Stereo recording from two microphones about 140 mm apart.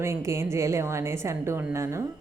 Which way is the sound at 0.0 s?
20° right (ahead or behind).